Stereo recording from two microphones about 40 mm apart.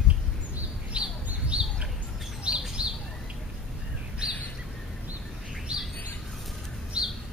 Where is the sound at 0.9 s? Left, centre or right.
Right.